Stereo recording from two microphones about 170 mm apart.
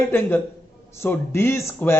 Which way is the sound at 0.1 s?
10° left (ahead or behind).